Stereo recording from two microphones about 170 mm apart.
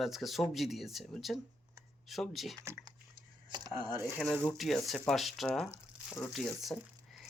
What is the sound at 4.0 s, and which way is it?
Speech, 15° right (ahead or behind).